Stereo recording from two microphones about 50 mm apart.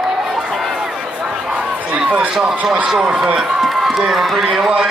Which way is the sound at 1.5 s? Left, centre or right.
Right.